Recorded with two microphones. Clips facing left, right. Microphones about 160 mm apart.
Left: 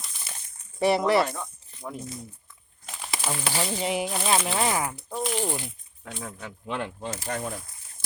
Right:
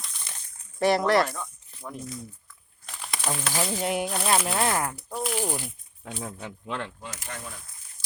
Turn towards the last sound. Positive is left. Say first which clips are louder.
# left 7 dB
turn(degrees=30)  # may be behind; listen again after turning